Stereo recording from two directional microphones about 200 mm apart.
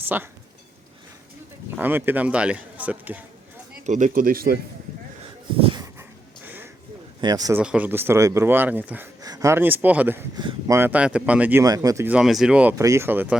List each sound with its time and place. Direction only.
0.1 s speech: 10° right (ahead or behind)
1.7 s speech: 10° right (ahead or behind)
3.8 s speech: 40° right (ahead or behind)
6.0 s wheeze: 10° right (ahead or behind)
7.2 s a man's voice: 20° right (ahead or behind)
7.6 s speech: 5° right (ahead or behind)